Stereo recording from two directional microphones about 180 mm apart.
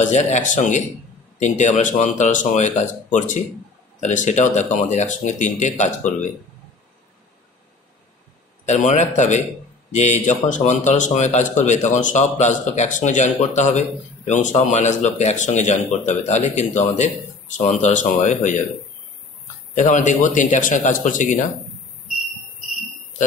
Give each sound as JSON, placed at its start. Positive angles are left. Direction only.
{"t": 0.0, "sound": "speech", "side_deg": 40}
{"t": 8.6, "sound": "speech", "side_deg": 40}
{"t": 19.7, "sound": "speech", "side_deg": 40}